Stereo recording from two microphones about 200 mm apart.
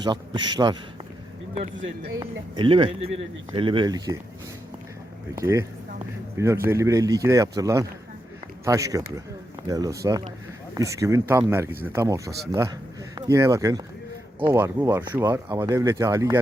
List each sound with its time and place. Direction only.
0.0 s speech: 20° right (ahead or behind)
2.1 s speech: 25° right (ahead or behind)
5.3 s a man's voice: 15° right (ahead or behind)